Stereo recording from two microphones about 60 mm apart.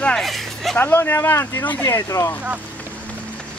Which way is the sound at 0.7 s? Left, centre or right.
Left.